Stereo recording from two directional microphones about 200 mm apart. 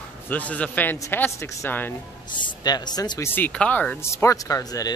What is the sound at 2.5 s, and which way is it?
Speech, 20° left (ahead or behind).